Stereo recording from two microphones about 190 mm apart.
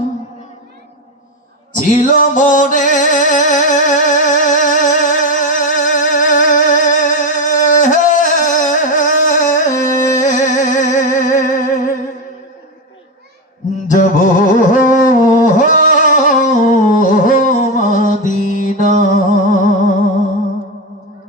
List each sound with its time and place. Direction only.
1.9 s music: 45° left (ahead or behind)
13.8 s music: 40° left (ahead or behind)